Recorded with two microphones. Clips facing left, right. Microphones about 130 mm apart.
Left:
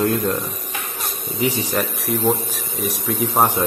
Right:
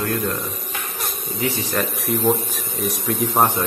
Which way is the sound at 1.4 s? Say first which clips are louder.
Left 2 dB; 15° left (ahead or behind).